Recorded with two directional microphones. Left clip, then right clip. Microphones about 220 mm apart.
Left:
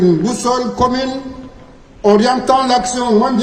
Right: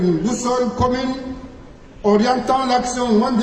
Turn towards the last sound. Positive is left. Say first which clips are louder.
# left 4 dB
turn(degrees=45)  # may be behind; listen again after turning